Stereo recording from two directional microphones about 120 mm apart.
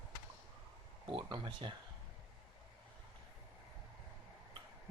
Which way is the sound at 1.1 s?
40° right (ahead or behind).